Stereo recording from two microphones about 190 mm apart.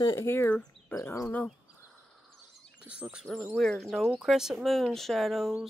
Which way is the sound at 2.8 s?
5° right (ahead or behind).